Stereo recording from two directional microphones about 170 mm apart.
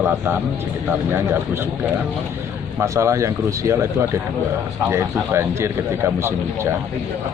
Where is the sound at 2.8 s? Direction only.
15° right (ahead or behind).